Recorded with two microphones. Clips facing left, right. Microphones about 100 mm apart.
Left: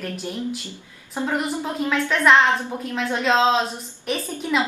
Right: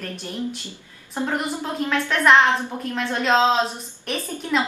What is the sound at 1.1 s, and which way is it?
A woman's voice, centre (ahead or behind).